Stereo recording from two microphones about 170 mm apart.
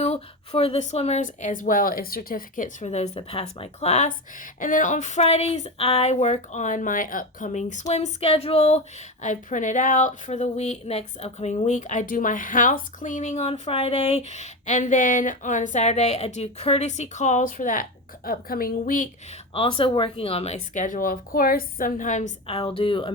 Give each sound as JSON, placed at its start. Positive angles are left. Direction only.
{"t": 0.0, "sound": "a woman's voice", "side_deg": 40}
{"t": 19.5, "sound": "speech", "side_deg": 30}
{"t": 22.5, "sound": "a woman's voice", "side_deg": 35}